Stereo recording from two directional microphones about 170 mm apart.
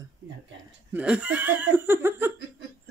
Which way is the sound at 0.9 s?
10° right (ahead or behind).